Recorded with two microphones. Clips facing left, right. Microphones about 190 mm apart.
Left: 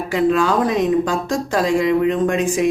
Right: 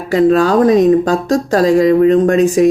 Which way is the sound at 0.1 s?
40° right (ahead or behind).